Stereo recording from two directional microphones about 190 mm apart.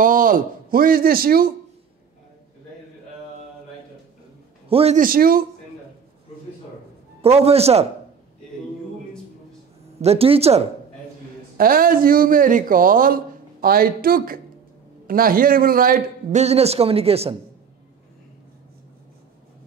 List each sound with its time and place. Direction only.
0.0 s a man's voice: 45° right (ahead or behind)
4.6 s a man's voice: 30° right (ahead or behind)
4.9 s a man's voice: 50° right (ahead or behind)
7.2 s a man's voice: 30° right (ahead or behind)
10.0 s a man's voice: 30° right (ahead or behind)
11.5 s a man's voice: 50° right (ahead or behind); by 17.4 s 30° right (ahead or behind)